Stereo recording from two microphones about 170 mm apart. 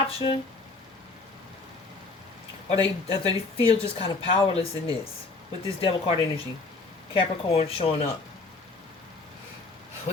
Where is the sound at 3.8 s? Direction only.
35° left (ahead or behind).